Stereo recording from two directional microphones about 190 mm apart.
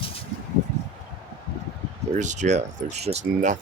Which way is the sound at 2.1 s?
40° right (ahead or behind).